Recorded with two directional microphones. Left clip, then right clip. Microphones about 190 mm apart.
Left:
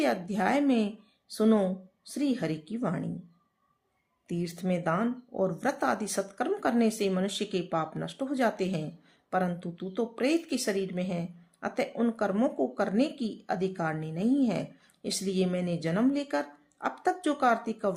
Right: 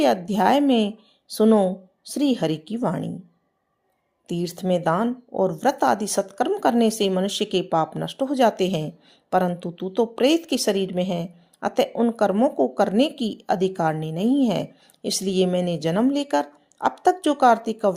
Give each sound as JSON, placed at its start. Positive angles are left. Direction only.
{"t": 0.0, "sound": "a woman's voice", "side_deg": -35}
{"t": 4.3, "sound": "a woman's voice", "side_deg": -30}